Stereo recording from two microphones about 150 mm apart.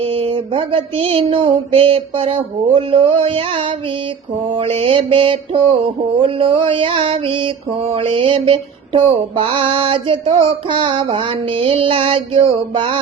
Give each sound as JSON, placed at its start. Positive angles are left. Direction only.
{"t": 0.0, "sound": "mantra", "side_deg": -40}